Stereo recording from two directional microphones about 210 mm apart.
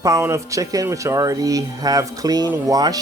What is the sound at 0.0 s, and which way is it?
Speech, 15° right (ahead or behind).